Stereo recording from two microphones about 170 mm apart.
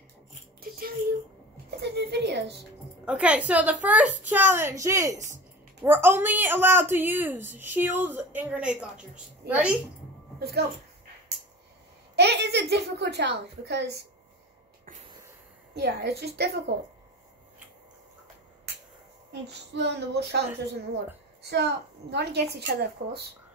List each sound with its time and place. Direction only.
0.6 s a sound: 60° right (ahead or behind)
1.8 s a sound: 80° right
3.1 s a woman's voice: 5° right (ahead or behind)
12.2 s a woman's voice: 80° right
15.7 s a woman's voice: 80° right
19.7 s a woman's voice: 80° right